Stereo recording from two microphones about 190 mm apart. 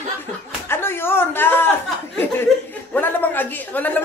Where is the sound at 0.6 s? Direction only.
10° left (ahead or behind).